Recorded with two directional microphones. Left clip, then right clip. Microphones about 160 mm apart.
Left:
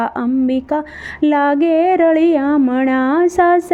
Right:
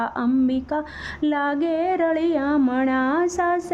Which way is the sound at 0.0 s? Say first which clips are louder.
Left 5 dB; 25° left (ahead or behind).